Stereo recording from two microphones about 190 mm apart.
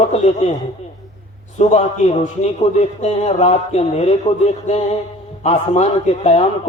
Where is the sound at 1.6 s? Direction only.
35° left (ahead or behind).